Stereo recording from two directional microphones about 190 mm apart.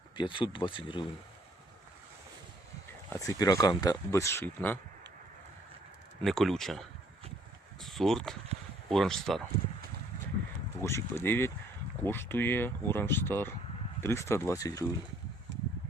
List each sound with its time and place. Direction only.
0.2 s speech: 25° left (ahead or behind)
3.1 s speech: 20° left (ahead or behind)
6.2 s speech: centre (ahead or behind)
10.8 s speech: 15° left (ahead or behind)
15.5 s a sound: 65° right (ahead or behind)